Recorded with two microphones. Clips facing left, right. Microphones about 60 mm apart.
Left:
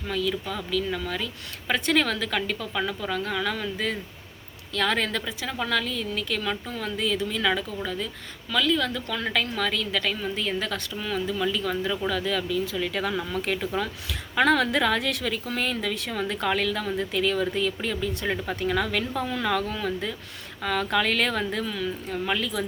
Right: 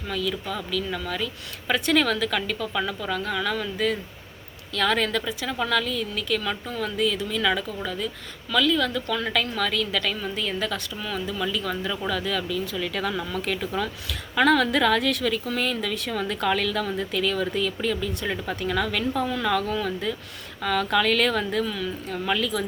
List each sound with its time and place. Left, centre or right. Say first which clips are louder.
0.1 s a woman's voice: even; left